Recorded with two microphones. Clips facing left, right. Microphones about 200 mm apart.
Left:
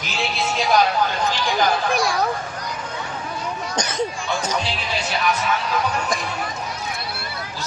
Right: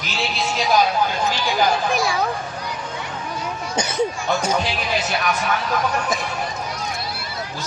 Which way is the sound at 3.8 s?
10° right (ahead or behind).